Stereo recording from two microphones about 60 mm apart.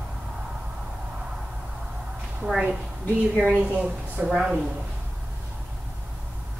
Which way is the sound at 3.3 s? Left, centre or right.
Right.